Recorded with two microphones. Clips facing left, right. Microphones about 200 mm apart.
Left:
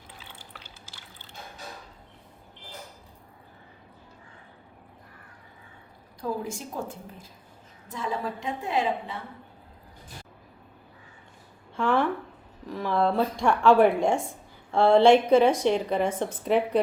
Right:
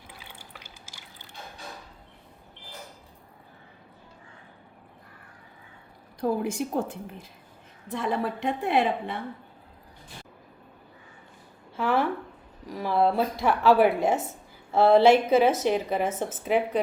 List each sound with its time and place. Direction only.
0.1 s fill: 10° right (ahead or behind)
6.1 s a woman's voice: 65° right (ahead or behind)
7.9 s a woman's voice: 60° right (ahead or behind)
11.8 s a sound: 5° right (ahead or behind)
12.6 s speech: 10° right (ahead or behind)